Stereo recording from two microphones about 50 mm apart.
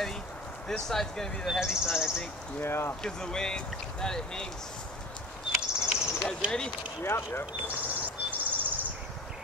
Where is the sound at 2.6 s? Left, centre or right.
Left.